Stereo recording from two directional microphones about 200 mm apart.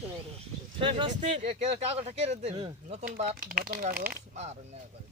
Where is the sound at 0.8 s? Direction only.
25° right (ahead or behind).